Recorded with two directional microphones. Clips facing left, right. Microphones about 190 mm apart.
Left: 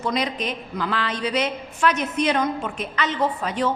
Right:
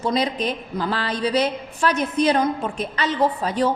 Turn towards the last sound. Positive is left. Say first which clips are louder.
# right 3 dB
turn(degrees=-35)  # may be behind; listen again after turning